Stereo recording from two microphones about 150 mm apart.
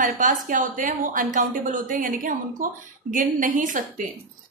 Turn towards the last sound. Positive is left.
turn(degrees=-60)  # may be behind; listen again after turning